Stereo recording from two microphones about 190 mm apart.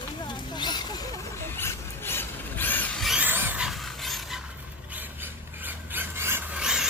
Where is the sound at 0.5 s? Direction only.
20° left (ahead or behind).